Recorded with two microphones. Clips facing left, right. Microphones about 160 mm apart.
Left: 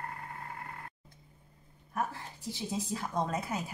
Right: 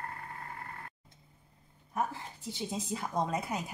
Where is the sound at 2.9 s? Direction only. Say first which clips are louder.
Right 2 dB; 15° right (ahead or behind).